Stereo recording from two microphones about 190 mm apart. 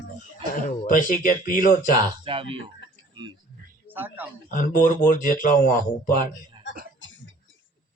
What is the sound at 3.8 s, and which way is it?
Speech, 10° right (ahead or behind).